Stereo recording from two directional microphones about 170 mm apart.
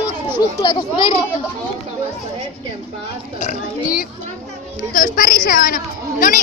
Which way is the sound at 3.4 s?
55° left (ahead or behind).